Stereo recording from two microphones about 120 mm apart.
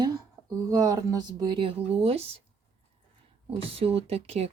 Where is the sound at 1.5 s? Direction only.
50° right (ahead or behind).